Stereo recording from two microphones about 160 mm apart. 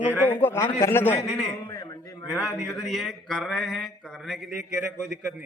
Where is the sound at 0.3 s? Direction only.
15° left (ahead or behind).